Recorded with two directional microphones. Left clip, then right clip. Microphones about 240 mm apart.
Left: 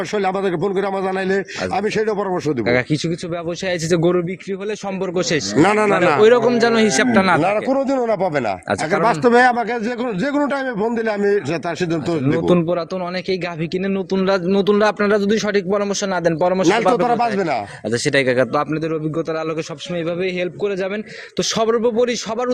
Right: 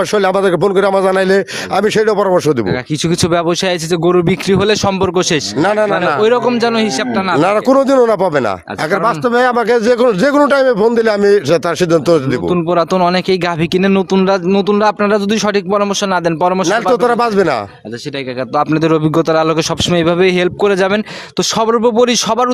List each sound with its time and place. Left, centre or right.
0.1 s a man's voice: right
3.9 s speech: right
4.3 s a man's voice: right
5.5 s a man's voice: centre
7.1 s speech: centre
7.3 s a man's voice: right
9.2 s a man's voice: centre
9.6 s a man's voice: right
12.7 s a man's voice: right
14.3 s speech: centre
16.9 s a man's voice: right
18.7 s a man's voice: right
21.6 s a man's voice: right